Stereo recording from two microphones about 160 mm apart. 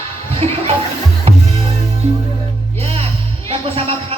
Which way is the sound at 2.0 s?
45° right (ahead or behind).